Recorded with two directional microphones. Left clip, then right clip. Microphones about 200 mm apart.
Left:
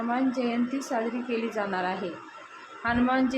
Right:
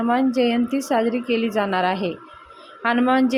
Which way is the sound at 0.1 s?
40° right (ahead or behind).